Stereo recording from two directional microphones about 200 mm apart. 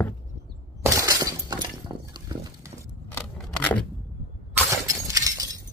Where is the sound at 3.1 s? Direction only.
5° left (ahead or behind).